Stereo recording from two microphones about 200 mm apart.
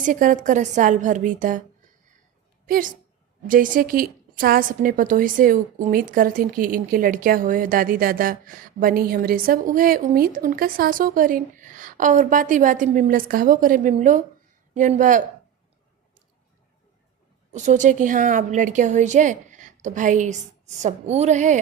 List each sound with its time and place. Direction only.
0.0 s a woman's voice: 40° right (ahead or behind)
2.6 s a woman's voice: 45° right (ahead or behind)
17.5 s a woman's voice: 35° right (ahead or behind)